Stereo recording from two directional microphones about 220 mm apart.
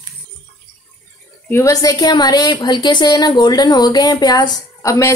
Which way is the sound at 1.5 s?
15° left (ahead or behind).